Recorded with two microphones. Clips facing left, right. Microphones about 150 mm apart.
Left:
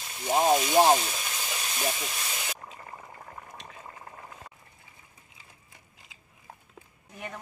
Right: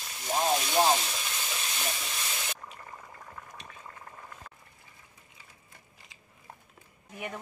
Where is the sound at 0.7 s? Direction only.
10° left (ahead or behind).